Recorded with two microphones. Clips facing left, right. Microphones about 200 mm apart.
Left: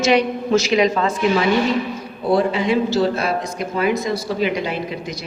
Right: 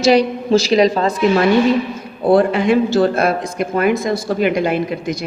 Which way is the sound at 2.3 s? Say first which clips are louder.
Right 4 dB; 55° right (ahead or behind).